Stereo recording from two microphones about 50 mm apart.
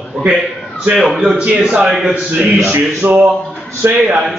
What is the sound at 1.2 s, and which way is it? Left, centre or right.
Speech, right.